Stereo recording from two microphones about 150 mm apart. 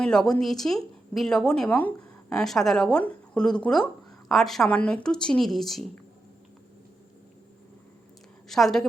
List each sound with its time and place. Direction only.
0.0 s speech: 5° left (ahead or behind)
8.4 s speech: centre (ahead or behind)